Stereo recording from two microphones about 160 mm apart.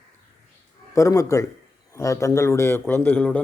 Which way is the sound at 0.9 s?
20° left (ahead or behind).